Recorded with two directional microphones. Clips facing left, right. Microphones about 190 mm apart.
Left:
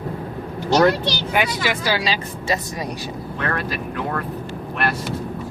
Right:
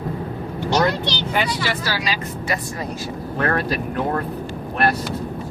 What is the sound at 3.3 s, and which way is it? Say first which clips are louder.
Speech: right 5 dB; 40° right (ahead or behind).